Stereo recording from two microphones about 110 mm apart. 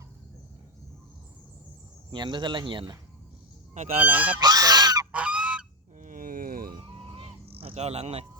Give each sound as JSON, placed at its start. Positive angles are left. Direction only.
{"t": 2.1, "sound": "speech", "side_deg": -45}
{"t": 4.0, "sound": "speech", "side_deg": -15}
{"t": 4.4, "sound": "goose", "side_deg": -35}
{"t": 5.1, "sound": "goose", "side_deg": -10}
{"t": 6.7, "sound": "music", "side_deg": -50}